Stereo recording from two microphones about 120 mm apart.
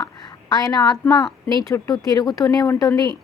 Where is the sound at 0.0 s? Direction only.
35° left (ahead or behind).